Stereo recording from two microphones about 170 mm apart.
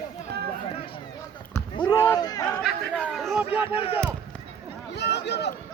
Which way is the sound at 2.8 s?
Centre (ahead or behind).